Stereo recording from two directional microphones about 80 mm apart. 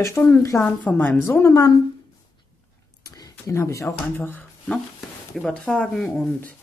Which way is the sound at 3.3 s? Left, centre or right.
Left.